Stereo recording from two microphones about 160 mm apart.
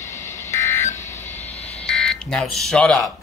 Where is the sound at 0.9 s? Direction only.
15° left (ahead or behind).